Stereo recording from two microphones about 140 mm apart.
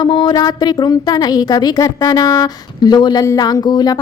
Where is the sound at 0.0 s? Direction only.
35° left (ahead or behind).